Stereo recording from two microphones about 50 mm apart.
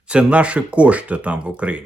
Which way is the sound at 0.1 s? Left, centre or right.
Right.